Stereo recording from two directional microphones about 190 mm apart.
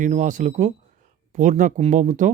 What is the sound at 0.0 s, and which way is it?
Speech, 40° right (ahead or behind).